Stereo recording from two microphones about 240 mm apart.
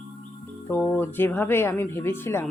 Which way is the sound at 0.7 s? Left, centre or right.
Centre.